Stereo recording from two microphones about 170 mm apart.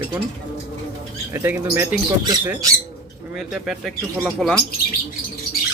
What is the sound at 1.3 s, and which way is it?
Speech, 15° right (ahead or behind).